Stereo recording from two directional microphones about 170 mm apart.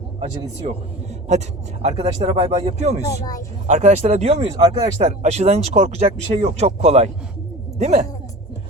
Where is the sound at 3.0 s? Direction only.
20° left (ahead or behind).